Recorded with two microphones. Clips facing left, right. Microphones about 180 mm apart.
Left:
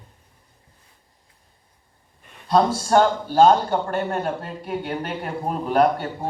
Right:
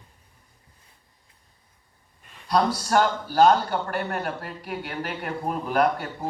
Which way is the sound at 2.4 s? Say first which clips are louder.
Left 4 dB; 25° left (ahead or behind).